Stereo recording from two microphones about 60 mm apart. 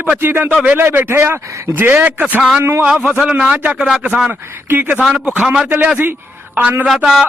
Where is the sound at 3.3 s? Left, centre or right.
Right.